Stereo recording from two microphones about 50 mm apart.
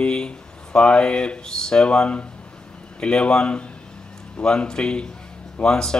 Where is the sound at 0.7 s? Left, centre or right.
Left.